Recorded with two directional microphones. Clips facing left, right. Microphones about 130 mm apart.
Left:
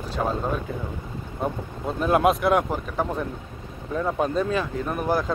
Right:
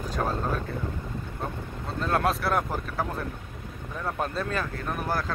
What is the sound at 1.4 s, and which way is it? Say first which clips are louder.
Speech: left 9 dB; 15° left (ahead or behind).